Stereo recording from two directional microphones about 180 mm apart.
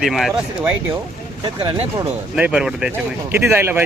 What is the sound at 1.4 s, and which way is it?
Speech, 25° right (ahead or behind).